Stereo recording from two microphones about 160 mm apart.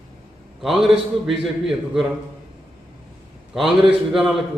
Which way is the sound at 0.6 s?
Centre (ahead or behind).